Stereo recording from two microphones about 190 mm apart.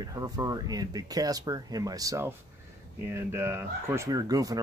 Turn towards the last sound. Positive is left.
turn(degrees=-20)  # may be behind; listen again after turning